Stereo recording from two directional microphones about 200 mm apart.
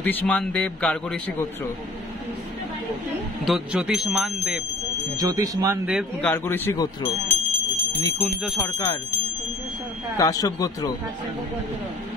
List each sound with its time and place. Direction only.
0.0 s speech: 5° left (ahead or behind)
3.4 s speech: centre (ahead or behind)
5.1 s speech: 15° right (ahead or behind)
6.2 s speech: 10° left (ahead or behind)
8.2 s speech: centre (ahead or behind)
8.5 s speech: 15° left (ahead or behind)
10.1 s speech: 15° left (ahead or behind)